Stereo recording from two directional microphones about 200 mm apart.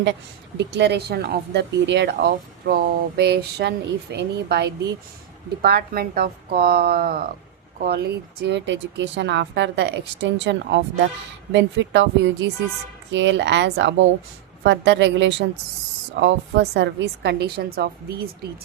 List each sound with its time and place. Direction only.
0.0 s a woman's voice: 65° right (ahead or behind)